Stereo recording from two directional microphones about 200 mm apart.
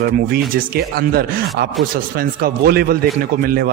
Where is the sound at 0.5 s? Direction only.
50° right (ahead or behind).